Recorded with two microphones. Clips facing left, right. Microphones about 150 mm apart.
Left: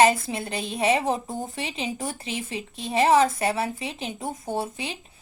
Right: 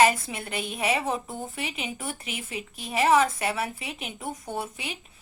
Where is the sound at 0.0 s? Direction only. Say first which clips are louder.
Left 2 dB; 30° left (ahead or behind).